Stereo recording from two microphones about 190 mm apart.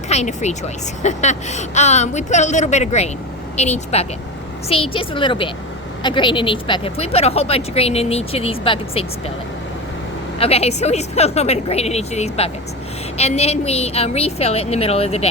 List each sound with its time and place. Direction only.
0.1 s a woman's voice: 35° left (ahead or behind)
10.3 s speech: 30° left (ahead or behind)